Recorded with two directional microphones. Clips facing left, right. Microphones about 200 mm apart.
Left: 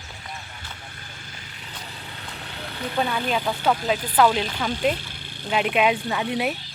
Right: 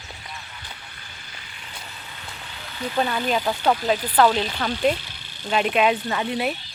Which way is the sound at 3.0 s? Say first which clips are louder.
Right 1 dB; 5° right (ahead or behind).